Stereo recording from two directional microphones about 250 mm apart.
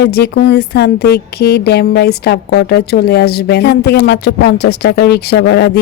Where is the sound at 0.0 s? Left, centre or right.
Left.